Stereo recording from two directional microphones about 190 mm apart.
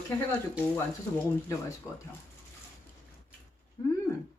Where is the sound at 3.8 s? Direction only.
15° left (ahead or behind).